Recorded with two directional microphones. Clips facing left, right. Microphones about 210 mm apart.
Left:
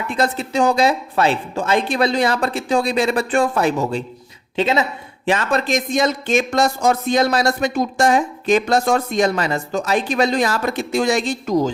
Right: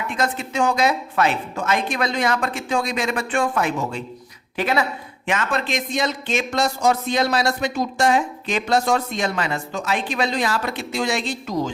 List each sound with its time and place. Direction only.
0.1 s speech: 35° left (ahead or behind)
4.5 s a woman's voice: 25° left (ahead or behind)
5.2 s speech: 35° left (ahead or behind)